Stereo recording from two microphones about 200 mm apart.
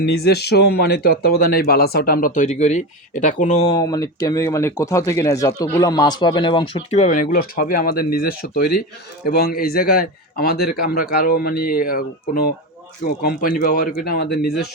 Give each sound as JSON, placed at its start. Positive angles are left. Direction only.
{"t": 0.0, "sound": "speech", "side_deg": 55}
{"t": 3.8, "sound": "speech", "side_deg": 20}
{"t": 7.0, "sound": "speech", "side_deg": 40}